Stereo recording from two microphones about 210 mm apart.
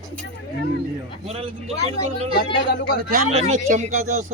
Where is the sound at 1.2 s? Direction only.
30° right (ahead or behind).